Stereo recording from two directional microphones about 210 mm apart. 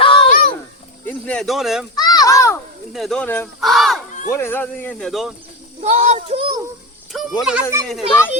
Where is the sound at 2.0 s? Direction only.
20° left (ahead or behind).